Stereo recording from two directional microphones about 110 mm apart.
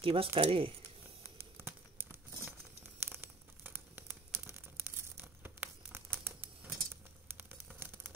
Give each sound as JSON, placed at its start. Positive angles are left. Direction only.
{"t": 0.0, "sound": "speech", "side_deg": -60}
{"t": 1.6, "sound": "crumpling", "side_deg": -20}
{"t": 6.2, "sound": "a sound", "side_deg": -15}